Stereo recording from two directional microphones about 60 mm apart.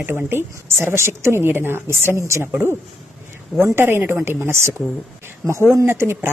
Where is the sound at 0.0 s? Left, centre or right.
Right.